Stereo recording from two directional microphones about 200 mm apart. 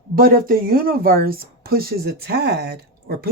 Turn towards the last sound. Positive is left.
turn(degrees=-55)  # may be behind; listen again after turning